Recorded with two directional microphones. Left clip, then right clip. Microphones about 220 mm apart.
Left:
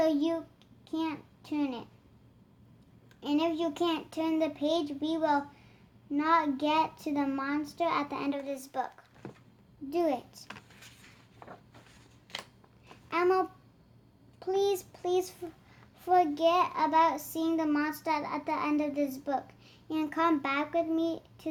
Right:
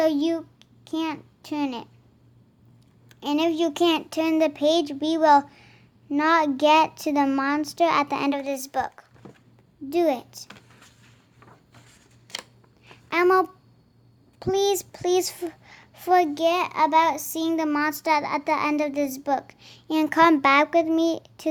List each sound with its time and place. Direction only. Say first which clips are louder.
0.0 s a child's voice: right 6 dB; 40° right (ahead or behind)
3.1 s a child's voice: right 6 dB; 35° right (ahead or behind)
12.3 s scissors: right 6 dB; 30° right (ahead or behind)
13.1 s a child's voice: right 8 dB; 35° right (ahead or behind)